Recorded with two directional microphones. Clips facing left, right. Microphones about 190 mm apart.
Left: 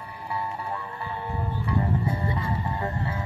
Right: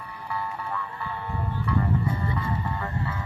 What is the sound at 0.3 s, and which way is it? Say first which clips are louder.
Music: left 1 dB; 25° left (ahead or behind).